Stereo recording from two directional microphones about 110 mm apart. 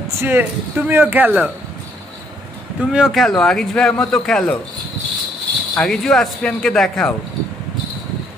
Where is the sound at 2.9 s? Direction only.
Centre (ahead or behind).